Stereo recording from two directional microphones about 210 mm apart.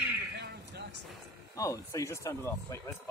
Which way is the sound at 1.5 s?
15° left (ahead or behind).